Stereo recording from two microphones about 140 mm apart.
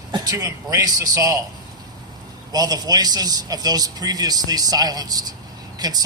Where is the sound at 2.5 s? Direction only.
25° right (ahead or behind).